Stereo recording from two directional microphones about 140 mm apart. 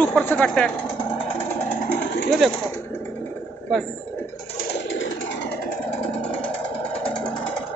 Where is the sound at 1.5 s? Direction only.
15° left (ahead or behind).